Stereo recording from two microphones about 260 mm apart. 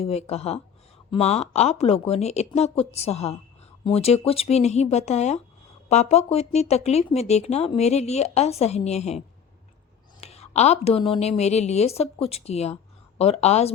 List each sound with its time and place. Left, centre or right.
0.0 s a woman's voice: left